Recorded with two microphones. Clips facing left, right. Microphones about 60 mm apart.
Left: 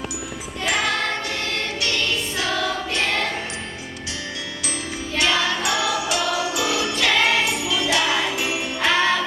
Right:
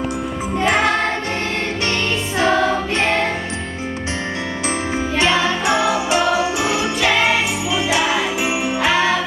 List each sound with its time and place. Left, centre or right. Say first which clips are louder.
0.6 s music: right 5 dB; right
2.4 s music: right 10 dB; right
5.1 s jingle bell: right 3 dB; right; by 9.2 s centre